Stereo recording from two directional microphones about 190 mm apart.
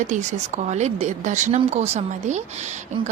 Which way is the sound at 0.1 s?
40° right (ahead or behind).